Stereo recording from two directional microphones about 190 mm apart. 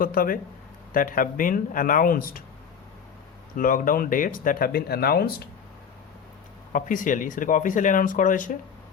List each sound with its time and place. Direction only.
0.0 s speech: 50° left (ahead or behind)
3.5 s speech: 45° left (ahead or behind)
6.7 s speech: 45° left (ahead or behind)